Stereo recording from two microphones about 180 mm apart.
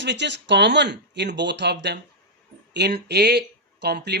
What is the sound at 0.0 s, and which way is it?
Speech, 75° right (ahead or behind).